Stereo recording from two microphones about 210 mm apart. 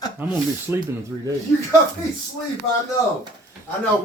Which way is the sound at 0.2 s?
10° right (ahead or behind).